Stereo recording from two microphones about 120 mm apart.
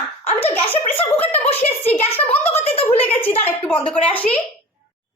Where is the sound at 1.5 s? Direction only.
55° left (ahead or behind).